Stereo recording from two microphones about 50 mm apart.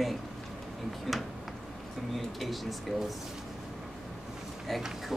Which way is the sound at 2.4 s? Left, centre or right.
Centre.